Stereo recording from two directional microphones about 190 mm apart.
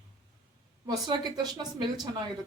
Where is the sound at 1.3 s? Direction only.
20° right (ahead or behind).